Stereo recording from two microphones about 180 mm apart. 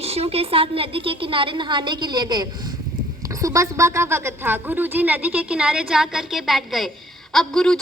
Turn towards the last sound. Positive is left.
turn(degrees=5)  # may be behind; listen again after turning